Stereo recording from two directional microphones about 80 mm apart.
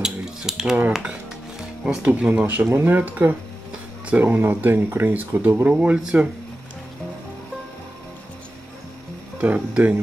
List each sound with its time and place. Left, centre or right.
0.0 s mechanisms: centre
1.9 s speech: centre
9.4 s speech: centre